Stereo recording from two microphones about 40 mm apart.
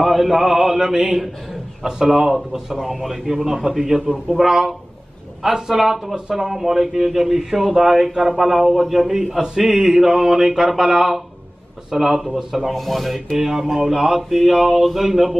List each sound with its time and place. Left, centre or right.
0.0 s speech: centre
1.9 s speech: centre
2.7 s speech: centre
12.7 s speech: centre
13.4 s speech: centre